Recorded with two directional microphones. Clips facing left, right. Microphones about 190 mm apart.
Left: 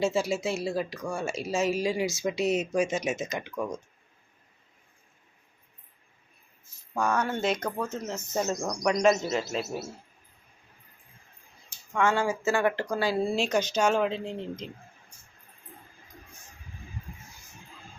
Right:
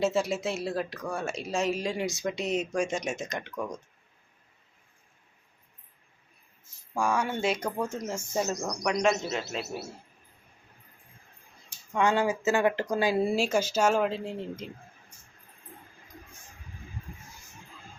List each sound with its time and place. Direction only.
0.0 s speech: centre (ahead or behind)
6.9 s speech: 10° right (ahead or behind)
11.9 s speech: 20° right (ahead or behind)
13.3 s speech: 10° right (ahead or behind)